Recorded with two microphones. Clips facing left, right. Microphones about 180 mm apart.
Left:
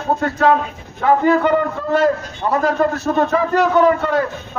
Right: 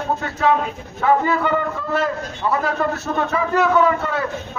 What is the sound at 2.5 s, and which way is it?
A man's voice, 40° left (ahead or behind).